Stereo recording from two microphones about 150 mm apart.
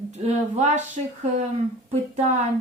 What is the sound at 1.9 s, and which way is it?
Speech, 50° right (ahead or behind).